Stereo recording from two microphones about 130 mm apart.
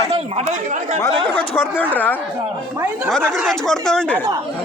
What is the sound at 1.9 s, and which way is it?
Speech, 15° left (ahead or behind).